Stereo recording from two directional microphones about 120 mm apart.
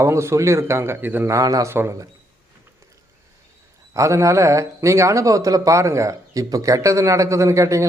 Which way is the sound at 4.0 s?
25° right (ahead or behind).